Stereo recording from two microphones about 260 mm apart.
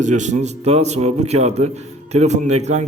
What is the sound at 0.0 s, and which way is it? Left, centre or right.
Speech, right.